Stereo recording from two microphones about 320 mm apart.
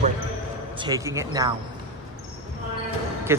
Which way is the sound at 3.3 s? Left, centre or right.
Centre.